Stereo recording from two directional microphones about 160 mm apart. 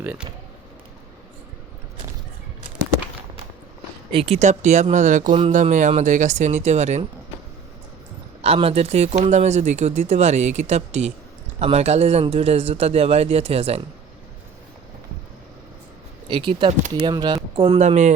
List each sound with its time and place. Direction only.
0.0 s speech: 10° right (ahead or behind)
4.1 s speech: 40° right (ahead or behind)
5.3 s speech: 35° right (ahead or behind)
5.5 s speech: 50° right (ahead or behind)
8.4 s speech: 40° right (ahead or behind)
16.3 s speech: 30° right (ahead or behind)
17.7 s speech: 45° right (ahead or behind)